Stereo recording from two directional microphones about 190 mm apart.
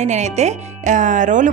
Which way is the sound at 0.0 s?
35° right (ahead or behind).